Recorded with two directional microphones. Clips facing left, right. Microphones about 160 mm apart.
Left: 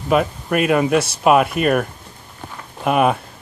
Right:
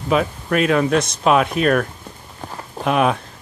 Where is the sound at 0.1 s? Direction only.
5° left (ahead or behind).